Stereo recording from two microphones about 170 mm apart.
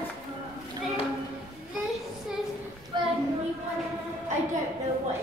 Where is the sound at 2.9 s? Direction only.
25° right (ahead or behind).